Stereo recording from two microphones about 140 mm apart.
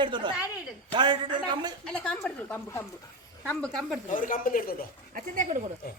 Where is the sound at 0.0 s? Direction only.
35° right (ahead or behind).